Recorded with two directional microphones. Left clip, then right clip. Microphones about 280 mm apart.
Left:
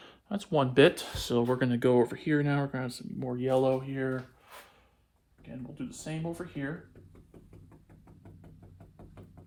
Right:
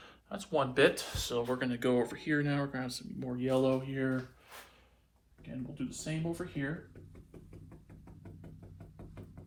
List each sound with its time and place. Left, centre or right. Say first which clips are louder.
0.0 s speech: left 4 dB; left
6.1 s speech: left 1 dB; left
8.0 s knock: right 1 dB; centre
9.0 s music: even; centre